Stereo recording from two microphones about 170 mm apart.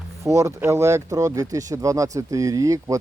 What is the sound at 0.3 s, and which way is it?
Speech, 15° right (ahead or behind).